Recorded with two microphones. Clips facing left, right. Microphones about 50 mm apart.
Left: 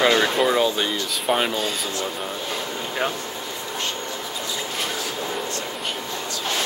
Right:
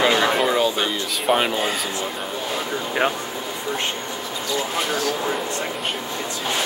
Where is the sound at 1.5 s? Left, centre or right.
Right.